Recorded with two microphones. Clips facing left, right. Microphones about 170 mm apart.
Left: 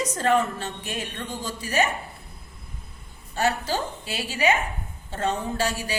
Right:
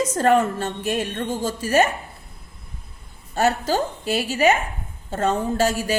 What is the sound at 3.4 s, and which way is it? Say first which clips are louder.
Speech: right 5 dB; 45° right (ahead or behind).